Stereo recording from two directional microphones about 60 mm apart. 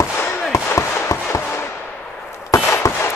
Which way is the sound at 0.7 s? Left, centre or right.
Left.